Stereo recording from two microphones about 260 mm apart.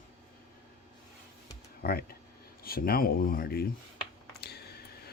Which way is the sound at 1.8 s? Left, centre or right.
Left.